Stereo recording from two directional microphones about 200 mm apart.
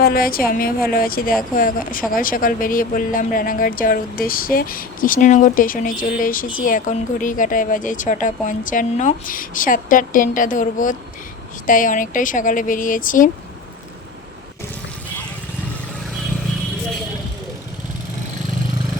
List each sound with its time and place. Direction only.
0.0 s a woman's voice: 45° left (ahead or behind)